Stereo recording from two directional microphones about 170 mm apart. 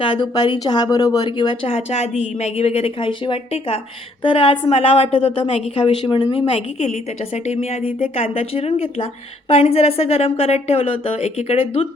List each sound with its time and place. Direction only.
0.0 s a woman's voice: 25° left (ahead or behind)
6.5 s a woman's voice: 40° left (ahead or behind)